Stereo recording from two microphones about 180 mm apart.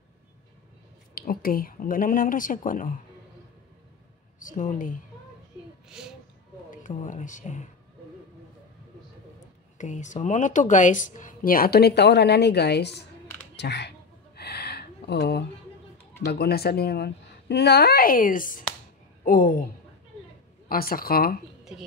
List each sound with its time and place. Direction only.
1.1 s speech: 55° left (ahead or behind)
4.4 s speech: 45° left (ahead or behind)
5.9 s speech: 5° right (ahead or behind)
6.7 s speech: 45° left (ahead or behind)
9.8 s speech: 40° left (ahead or behind); by 13.0 s 65° left (ahead or behind)
13.6 s a sound: 70° left (ahead or behind)
16.3 s a woman's voice: 60° left (ahead or behind)